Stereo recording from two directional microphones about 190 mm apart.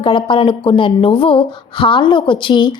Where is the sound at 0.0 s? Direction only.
25° left (ahead or behind).